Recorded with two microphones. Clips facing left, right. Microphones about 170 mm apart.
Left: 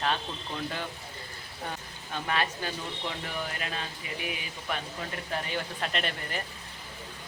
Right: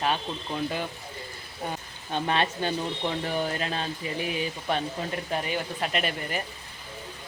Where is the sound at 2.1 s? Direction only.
25° right (ahead or behind).